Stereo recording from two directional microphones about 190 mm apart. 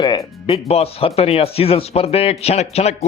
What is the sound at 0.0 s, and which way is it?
Music, 25° left (ahead or behind).